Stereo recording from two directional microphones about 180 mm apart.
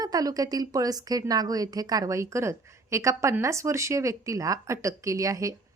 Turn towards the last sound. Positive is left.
turn(degrees=-20)  # may be behind; listen again after turning